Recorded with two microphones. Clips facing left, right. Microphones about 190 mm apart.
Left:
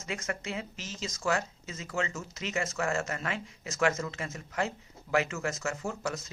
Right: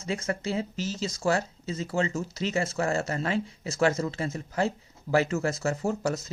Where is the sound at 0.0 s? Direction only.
30° right (ahead or behind).